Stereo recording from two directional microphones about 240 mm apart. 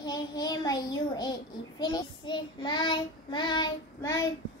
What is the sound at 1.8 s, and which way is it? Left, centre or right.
Child singing, centre.